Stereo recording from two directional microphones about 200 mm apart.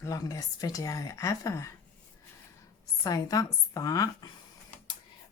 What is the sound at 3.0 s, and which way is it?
A woman's voice, 15° left (ahead or behind).